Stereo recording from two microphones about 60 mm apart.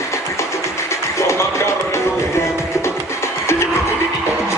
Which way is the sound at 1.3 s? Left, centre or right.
Left.